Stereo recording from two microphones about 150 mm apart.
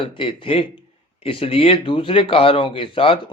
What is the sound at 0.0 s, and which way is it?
A man's voice, 35° left (ahead or behind).